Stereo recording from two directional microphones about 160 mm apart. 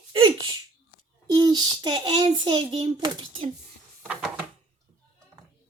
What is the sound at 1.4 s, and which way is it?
A child's voice, 25° right (ahead or behind).